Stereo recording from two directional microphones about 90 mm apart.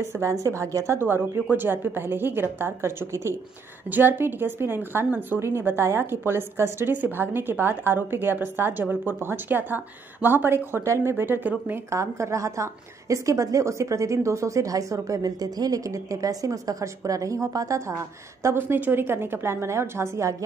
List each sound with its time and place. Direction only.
0.0 s a woman's voice: 30° right (ahead or behind)
11.9 s a woman's voice: 35° right (ahead or behind)
18.4 s a woman's voice: 25° right (ahead or behind)